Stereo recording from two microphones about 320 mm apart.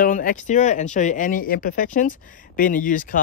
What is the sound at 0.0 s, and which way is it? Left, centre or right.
Speech, left.